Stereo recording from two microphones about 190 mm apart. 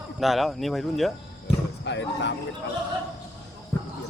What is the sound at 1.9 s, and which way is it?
Speech, 65° left (ahead or behind).